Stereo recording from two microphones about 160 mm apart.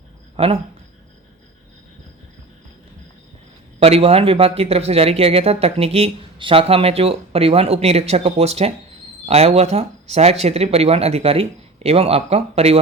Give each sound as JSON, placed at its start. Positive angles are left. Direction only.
{"t": 0.3, "sound": "speech", "side_deg": -35}
{"t": 3.8, "sound": "speech", "side_deg": -40}